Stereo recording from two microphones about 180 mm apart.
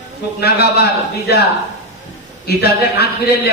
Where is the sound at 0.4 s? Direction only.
60° left (ahead or behind).